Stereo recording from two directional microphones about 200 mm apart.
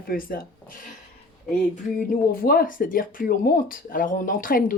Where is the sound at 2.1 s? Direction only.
45° left (ahead or behind).